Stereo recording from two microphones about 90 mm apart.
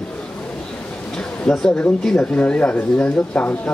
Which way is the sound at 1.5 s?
10° left (ahead or behind).